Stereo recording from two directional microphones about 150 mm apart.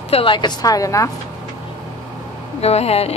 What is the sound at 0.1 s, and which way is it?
A woman's voice, 35° left (ahead or behind).